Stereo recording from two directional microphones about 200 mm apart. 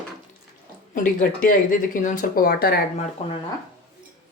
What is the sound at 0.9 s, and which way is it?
Speech, 45° left (ahead or behind).